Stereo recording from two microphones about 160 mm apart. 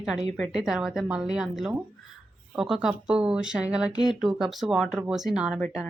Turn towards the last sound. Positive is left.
turn(degrees=-5)  # may be behind; listen again after turning